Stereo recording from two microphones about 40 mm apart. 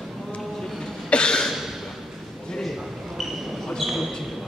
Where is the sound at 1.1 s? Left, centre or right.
Left.